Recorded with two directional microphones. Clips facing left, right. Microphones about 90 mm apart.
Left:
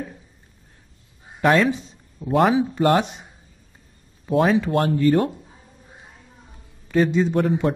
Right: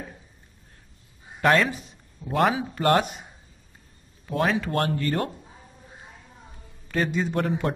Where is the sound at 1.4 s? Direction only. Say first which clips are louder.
Left 3 dB; 5° left (ahead or behind).